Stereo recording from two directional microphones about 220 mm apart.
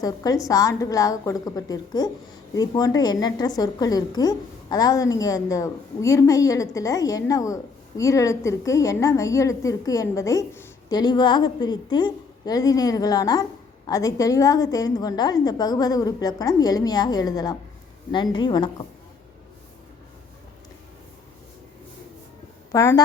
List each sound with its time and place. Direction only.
0.0 s a woman's voice: 15° left (ahead or behind)
22.7 s a woman's voice: 15° left (ahead or behind)